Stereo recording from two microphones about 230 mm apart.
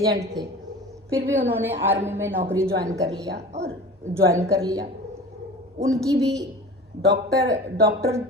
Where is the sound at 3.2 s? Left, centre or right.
Right.